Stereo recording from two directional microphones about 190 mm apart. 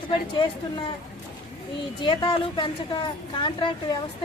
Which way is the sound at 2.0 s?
25° left (ahead or behind).